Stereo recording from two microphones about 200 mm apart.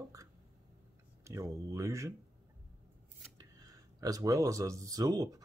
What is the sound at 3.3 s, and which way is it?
Speech, 20° right (ahead or behind).